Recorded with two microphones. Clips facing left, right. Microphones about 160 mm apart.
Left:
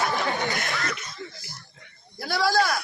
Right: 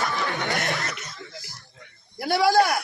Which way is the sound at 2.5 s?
55° right (ahead or behind).